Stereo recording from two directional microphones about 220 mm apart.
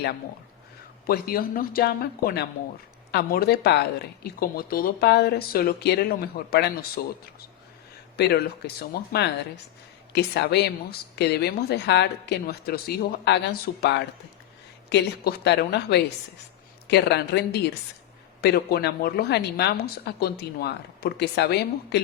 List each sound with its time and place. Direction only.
1.0 s speech: 45° left (ahead or behind)
8.1 s speech: 45° left (ahead or behind)